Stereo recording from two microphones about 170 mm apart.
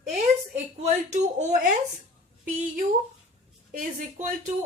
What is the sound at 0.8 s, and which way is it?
Speech, 45° right (ahead or behind).